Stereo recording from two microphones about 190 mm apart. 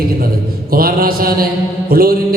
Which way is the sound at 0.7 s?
50° right (ahead or behind).